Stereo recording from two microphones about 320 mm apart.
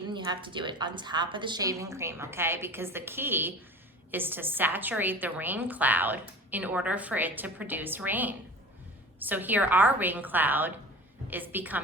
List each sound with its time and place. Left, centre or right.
0.1 s a woman's voice: centre